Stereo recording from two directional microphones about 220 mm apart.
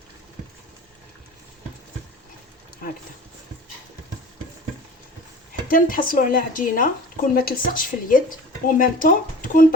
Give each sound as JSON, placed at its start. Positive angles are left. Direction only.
{"t": 5.6, "sound": "speech", "side_deg": 40}